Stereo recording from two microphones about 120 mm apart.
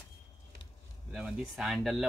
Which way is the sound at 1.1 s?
5° right (ahead or behind).